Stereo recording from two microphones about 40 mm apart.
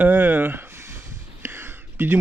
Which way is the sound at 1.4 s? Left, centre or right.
Right.